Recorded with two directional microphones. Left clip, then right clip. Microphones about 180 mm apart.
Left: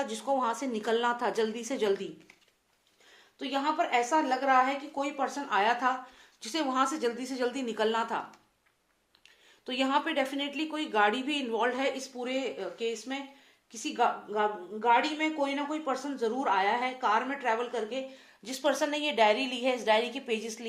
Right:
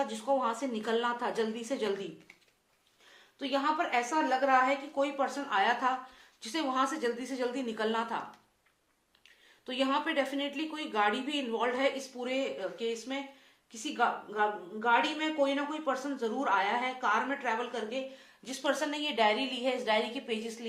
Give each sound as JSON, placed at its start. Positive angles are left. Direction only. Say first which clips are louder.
{"t": 0.0, "sound": "a woman's voice", "louder": "left 1 dB", "side_deg": 40}
{"t": 3.3, "sound": "a woman's voice", "louder": "left 1 dB", "side_deg": 35}
{"t": 9.6, "sound": "a woman's voice", "louder": "left 2 dB", "side_deg": 40}